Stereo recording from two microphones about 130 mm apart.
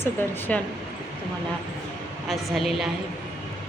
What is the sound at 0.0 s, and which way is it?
Speech, 15° left (ahead or behind).